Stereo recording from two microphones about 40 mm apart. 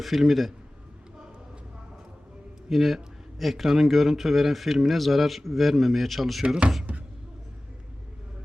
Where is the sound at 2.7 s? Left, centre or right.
Centre.